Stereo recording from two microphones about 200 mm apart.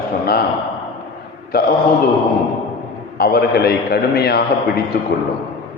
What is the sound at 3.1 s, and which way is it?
A man's voice, 50° left (ahead or behind).